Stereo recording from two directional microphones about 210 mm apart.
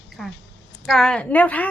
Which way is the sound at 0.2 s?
Centre (ahead or behind).